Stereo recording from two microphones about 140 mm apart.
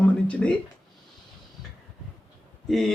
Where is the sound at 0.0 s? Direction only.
10° left (ahead or behind).